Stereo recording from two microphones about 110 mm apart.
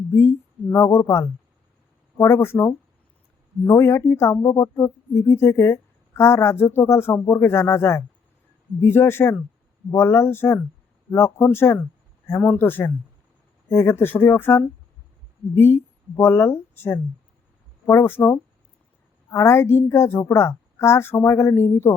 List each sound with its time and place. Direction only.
0.1 s speech: 20° left (ahead or behind)